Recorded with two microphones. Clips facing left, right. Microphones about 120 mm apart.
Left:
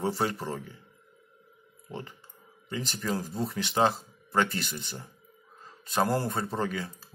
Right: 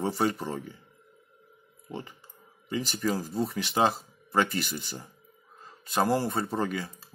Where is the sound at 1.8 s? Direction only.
5° right (ahead or behind).